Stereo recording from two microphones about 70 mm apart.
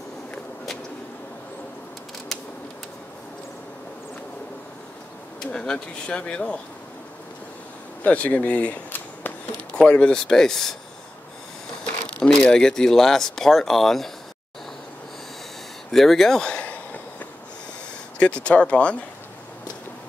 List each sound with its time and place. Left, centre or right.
5.4 s speech: centre
8.0 s speech: centre
9.8 s speech: centre
11.8 s speech: centre
15.9 s a sound: centre; by 17.3 s left
18.2 s speech: centre